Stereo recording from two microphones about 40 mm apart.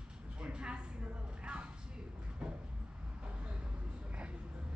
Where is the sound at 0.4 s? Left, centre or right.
Right.